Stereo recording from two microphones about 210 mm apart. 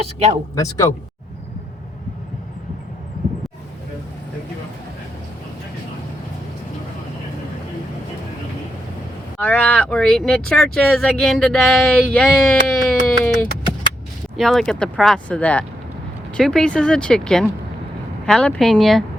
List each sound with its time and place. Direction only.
0.0 s speech: 30° right (ahead or behind)
0.5 s speech: 15° left (ahead or behind)
9.4 s speech: 5° left (ahead or behind)